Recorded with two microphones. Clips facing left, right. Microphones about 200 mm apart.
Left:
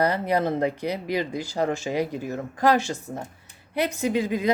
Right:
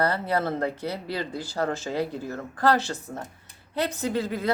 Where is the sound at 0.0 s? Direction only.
15° left (ahead or behind).